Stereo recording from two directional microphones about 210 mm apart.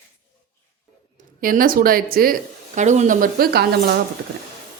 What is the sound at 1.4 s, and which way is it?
Speech, 40° right (ahead or behind).